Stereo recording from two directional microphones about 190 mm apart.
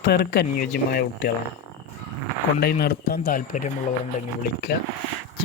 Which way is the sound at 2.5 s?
55° left (ahead or behind).